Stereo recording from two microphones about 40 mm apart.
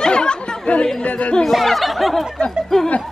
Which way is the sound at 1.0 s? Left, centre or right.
Left.